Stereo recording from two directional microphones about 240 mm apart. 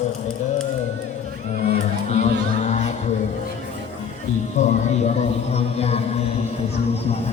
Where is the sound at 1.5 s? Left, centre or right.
Left.